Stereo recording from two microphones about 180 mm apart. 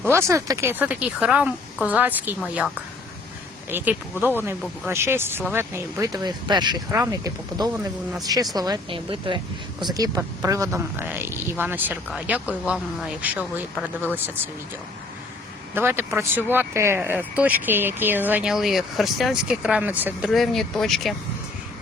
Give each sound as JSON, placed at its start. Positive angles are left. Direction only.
{"t": 0.0, "sound": "speech", "side_deg": -15}
{"t": 3.7, "sound": "speech", "side_deg": -10}
{"t": 15.7, "sound": "speech", "side_deg": -10}